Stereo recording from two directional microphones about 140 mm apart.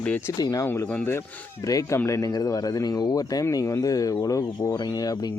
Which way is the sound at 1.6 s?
25° left (ahead or behind).